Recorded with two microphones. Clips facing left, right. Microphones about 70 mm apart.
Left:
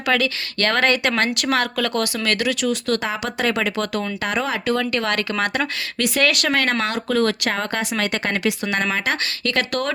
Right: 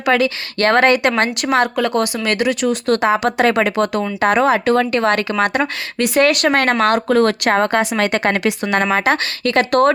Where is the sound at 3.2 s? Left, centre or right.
Right.